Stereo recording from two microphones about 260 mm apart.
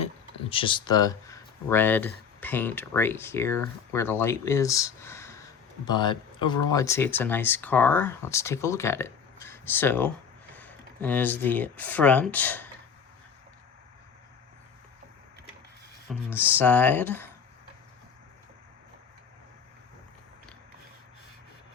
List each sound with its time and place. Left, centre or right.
0.5 s speech: centre
16.0 s speech: centre
16.6 s speech: centre